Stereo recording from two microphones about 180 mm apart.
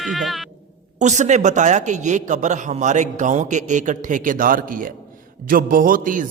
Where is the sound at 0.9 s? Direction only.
40° right (ahead or behind).